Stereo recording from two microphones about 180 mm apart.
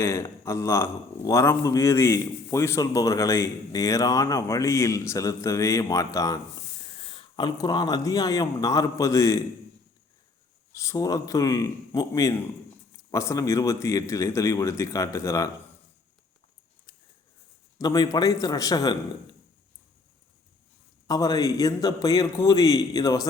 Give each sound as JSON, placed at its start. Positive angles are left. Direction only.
{"t": 0.0, "sound": "a man's voice", "side_deg": 15}
{"t": 6.9, "sound": "speech", "side_deg": 30}
{"t": 10.8, "sound": "a man's voice", "side_deg": 20}
{"t": 17.7, "sound": "speech", "side_deg": 20}
{"t": 21.1, "sound": "speech", "side_deg": 20}